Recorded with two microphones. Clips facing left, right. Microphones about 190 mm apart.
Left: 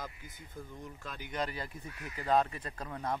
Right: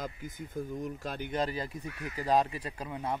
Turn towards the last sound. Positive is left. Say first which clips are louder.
# right 2 dB
turn(degrees=-10)  # may be behind; listen again after turning